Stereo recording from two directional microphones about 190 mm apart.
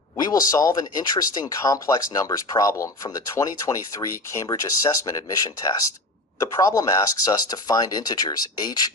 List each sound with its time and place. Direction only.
0.2 s speech: 20° left (ahead or behind)